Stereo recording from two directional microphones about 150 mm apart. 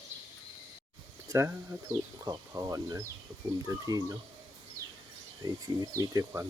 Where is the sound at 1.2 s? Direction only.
20° right (ahead or behind).